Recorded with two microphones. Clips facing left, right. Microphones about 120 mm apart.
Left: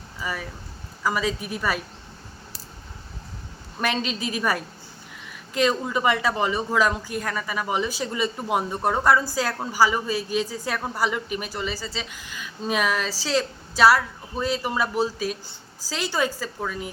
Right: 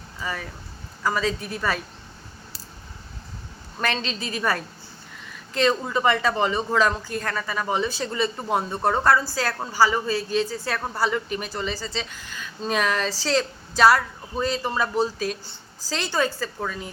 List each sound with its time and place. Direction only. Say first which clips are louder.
0.2 s a woman's voice: even; 10° left (ahead or behind)
3.8 s a woman's voice: left 1 dB; 10° left (ahead or behind)